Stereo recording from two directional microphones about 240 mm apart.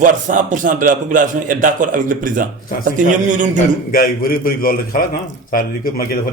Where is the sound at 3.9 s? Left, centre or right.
Left.